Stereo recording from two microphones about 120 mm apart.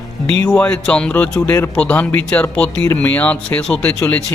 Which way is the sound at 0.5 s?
10° left (ahead or behind).